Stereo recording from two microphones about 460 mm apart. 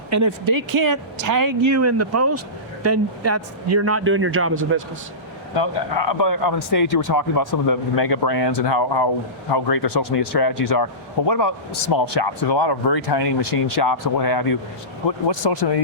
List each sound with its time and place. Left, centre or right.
0.1 s a man's voice: right
6.1 s a man's voice: left
11.3 s a man's voice: left
11.9 s speech: left
15.3 s speech: left